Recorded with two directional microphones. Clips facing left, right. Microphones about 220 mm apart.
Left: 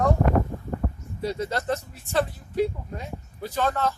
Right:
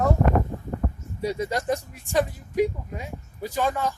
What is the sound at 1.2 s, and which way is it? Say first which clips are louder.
Speech: right 1 dB; 10° right (ahead or behind).